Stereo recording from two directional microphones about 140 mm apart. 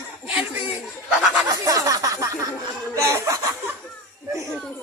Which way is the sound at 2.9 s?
20° right (ahead or behind).